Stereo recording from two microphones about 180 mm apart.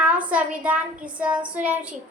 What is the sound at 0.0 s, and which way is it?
Child singing, 5° right (ahead or behind).